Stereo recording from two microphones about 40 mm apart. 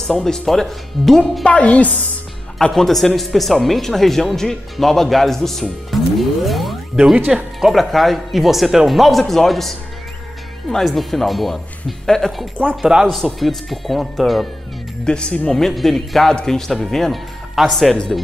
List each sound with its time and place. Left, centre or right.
0.0 s speech: centre
1.4 s a woman's voice: left
2.7 s speech: centre
7.7 s speech: centre
10.7 s speech: centre
12.6 s speech: right
13.0 s speech: centre
15.0 s speech: left
15.5 s speech: centre
16.3 s speech: centre